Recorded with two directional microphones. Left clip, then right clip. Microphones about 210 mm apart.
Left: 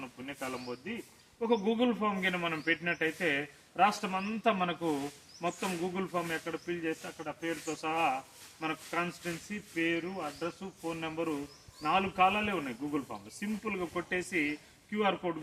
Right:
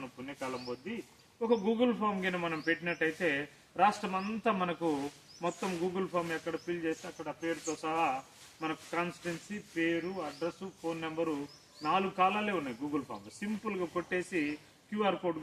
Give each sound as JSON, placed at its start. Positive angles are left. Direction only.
{"t": 0.3, "sound": "speech", "side_deg": 15}